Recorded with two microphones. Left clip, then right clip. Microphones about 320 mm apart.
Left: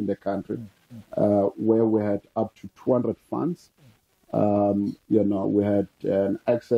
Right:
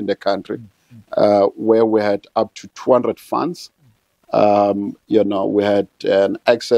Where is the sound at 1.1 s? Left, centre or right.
Centre.